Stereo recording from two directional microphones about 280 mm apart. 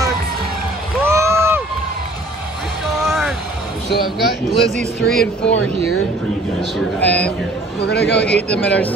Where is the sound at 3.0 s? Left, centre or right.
Centre.